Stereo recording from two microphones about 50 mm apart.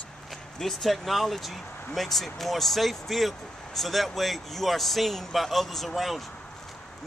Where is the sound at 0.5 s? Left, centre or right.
Centre.